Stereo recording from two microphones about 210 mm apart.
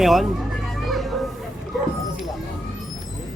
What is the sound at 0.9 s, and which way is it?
Children playing, centre (ahead or behind).